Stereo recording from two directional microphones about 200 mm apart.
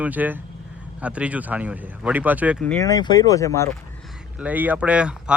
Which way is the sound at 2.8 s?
20° left (ahead or behind).